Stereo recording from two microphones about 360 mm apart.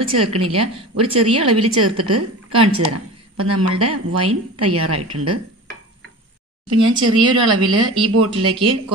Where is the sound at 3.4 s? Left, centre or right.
Right.